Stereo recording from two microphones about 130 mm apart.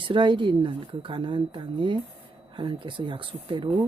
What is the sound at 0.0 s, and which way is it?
Speech, 40° right (ahead or behind).